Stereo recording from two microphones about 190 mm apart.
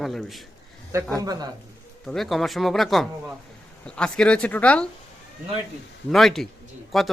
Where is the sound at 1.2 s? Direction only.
20° right (ahead or behind).